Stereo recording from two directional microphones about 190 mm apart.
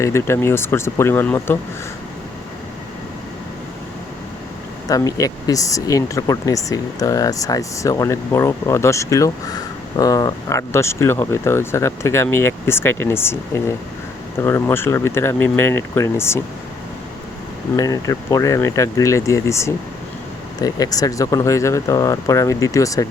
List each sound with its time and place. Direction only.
0.0 s speech: 15° left (ahead or behind)
4.9 s speech: 20° left (ahead or behind)
17.7 s speech: 20° left (ahead or behind)